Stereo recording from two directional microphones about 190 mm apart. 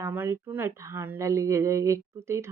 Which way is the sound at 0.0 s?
10° right (ahead or behind).